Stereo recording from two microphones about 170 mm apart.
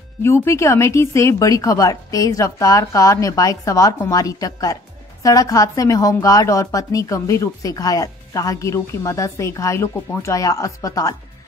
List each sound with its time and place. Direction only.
0.2 s a woman's voice: 15° left (ahead or behind)